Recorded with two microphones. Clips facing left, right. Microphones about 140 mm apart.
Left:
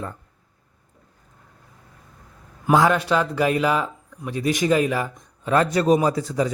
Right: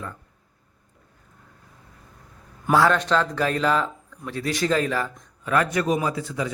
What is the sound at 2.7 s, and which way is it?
Speech, 10° left (ahead or behind).